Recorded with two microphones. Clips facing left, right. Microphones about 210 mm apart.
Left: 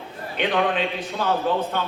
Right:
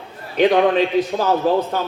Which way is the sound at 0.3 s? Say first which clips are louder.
Right 8 dB; 40° right (ahead or behind).